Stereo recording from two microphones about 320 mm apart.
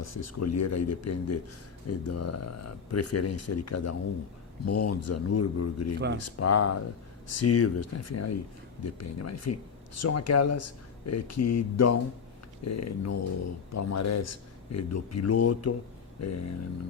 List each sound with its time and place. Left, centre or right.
0.3 s speech: left